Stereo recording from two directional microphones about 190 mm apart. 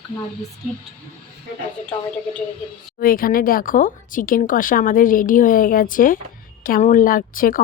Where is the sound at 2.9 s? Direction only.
50° left (ahead or behind).